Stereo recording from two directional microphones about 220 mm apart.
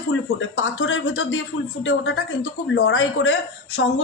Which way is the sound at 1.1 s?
80° left.